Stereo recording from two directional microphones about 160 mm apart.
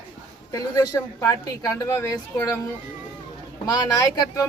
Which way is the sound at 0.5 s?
20° left (ahead or behind).